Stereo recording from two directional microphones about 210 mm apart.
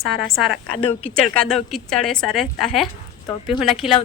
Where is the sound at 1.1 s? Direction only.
5° left (ahead or behind).